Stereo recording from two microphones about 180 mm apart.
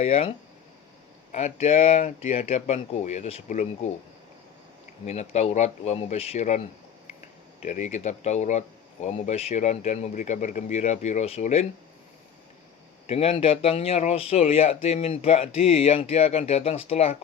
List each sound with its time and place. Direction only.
0.0 s speech: 35° left (ahead or behind)
5.0 s speech: 40° left (ahead or behind)
7.6 s speech: 40° left (ahead or behind)
13.1 s speech: 35° left (ahead or behind)